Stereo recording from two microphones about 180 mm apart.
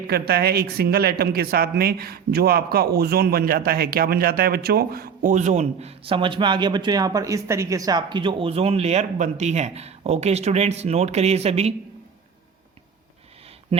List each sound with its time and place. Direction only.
0.1 s a woman's voice: 60° right (ahead or behind); by 11.7 s 35° right (ahead or behind)